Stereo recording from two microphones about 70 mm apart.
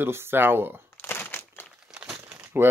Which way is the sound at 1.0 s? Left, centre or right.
Left.